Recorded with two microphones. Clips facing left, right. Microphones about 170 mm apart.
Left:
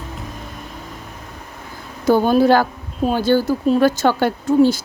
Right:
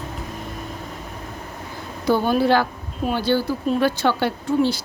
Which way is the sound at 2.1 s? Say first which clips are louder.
Left 5 dB; 45° left (ahead or behind).